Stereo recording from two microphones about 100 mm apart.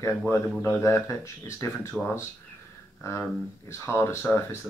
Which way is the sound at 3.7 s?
25° left (ahead or behind).